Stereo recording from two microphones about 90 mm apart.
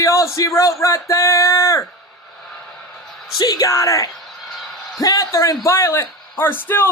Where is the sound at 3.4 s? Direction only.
45° left (ahead or behind).